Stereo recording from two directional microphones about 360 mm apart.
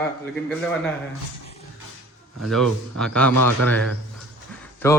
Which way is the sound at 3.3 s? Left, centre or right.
Right.